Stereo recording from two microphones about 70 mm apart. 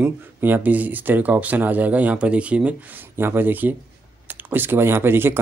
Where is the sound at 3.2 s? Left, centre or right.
Right.